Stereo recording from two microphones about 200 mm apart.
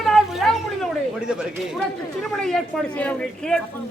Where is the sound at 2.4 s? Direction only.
5° left (ahead or behind).